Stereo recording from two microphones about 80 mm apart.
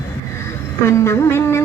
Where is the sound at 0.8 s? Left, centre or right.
Left.